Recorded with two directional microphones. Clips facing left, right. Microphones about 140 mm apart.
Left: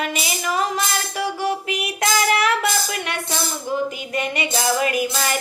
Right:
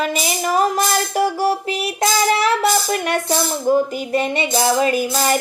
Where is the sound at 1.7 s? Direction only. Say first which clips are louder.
Right 3 dB; 30° right (ahead or behind).